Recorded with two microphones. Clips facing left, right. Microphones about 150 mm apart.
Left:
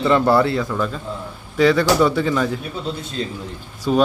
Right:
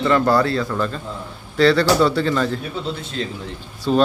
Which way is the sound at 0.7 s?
5° left (ahead or behind).